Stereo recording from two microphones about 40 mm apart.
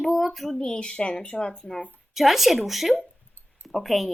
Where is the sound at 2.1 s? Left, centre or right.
Centre.